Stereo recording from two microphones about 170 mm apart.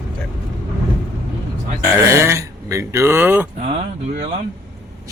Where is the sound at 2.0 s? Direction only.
15° right (ahead or behind).